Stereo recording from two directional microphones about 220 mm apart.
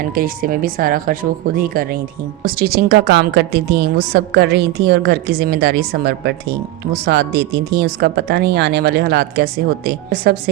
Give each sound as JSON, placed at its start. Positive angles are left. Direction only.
{"t": 0.0, "sound": "a woman's voice", "side_deg": -40}